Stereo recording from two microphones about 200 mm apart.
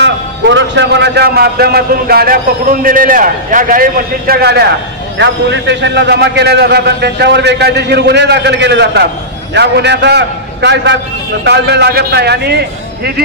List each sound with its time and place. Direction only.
0.0 s a man's voice: 65° right (ahead or behind)